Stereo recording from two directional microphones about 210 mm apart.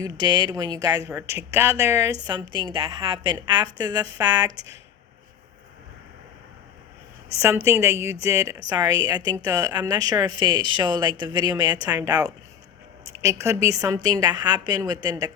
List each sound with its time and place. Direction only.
0.0 s a woman's voice: 20° right (ahead or behind)
7.3 s a woman's voice: 15° right (ahead or behind)